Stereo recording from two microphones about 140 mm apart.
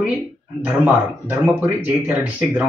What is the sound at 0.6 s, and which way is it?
Speech, 10° right (ahead or behind).